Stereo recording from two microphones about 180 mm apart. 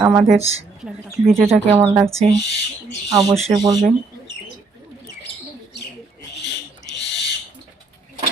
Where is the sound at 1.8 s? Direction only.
15° right (ahead or behind).